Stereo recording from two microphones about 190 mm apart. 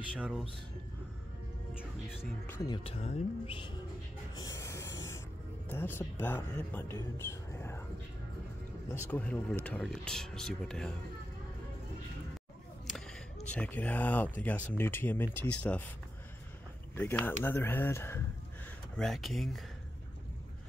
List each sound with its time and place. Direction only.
0.1 s speech: 5° right (ahead or behind)
1.8 s music: 5° right (ahead or behind)
2.7 s speech: 30° left (ahead or behind)
4.4 s a sound: 15° left (ahead or behind)
5.7 s speech: 10° left (ahead or behind)
8.8 s speech: 15° left (ahead or behind)
13.5 s speech: 5° left (ahead or behind)
16.9 s speech: 10° left (ahead or behind)
18.9 s speech: centre (ahead or behind)